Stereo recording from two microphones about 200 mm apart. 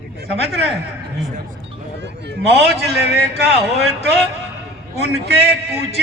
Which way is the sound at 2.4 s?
30° left (ahead or behind).